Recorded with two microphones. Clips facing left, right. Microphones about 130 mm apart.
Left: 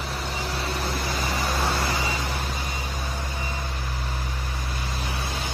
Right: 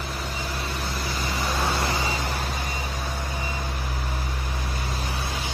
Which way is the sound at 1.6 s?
15° right (ahead or behind).